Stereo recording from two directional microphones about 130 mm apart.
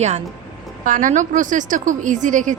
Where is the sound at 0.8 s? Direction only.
85° right.